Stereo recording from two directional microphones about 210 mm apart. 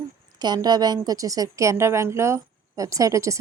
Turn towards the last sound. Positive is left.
turn(degrees=-15)  # may be behind; listen again after turning